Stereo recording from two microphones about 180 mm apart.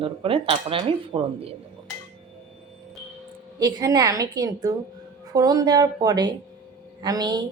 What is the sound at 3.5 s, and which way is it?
A woman's voice, 20° right (ahead or behind).